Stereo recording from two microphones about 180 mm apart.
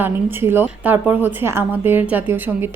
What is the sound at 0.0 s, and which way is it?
Speech, 10° right (ahead or behind).